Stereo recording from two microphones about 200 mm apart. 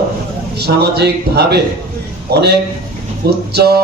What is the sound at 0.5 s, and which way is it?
A man's voice, 55° right (ahead or behind).